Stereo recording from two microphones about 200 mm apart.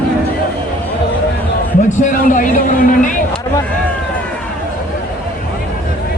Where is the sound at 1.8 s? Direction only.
40° left (ahead or behind).